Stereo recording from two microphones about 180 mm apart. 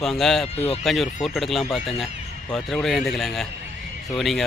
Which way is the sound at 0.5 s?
35° left (ahead or behind).